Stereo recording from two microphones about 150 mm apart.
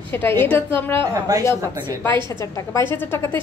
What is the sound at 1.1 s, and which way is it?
Speech, 20° right (ahead or behind).